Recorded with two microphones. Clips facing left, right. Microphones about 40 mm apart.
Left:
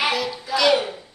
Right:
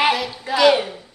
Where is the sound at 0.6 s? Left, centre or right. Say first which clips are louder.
Right 3 dB; centre.